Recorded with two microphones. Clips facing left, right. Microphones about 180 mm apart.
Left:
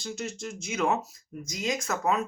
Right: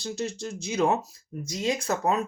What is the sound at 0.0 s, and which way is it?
Speech, 35° right (ahead or behind).